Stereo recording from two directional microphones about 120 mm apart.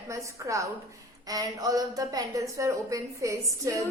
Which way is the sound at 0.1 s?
25° right (ahead or behind).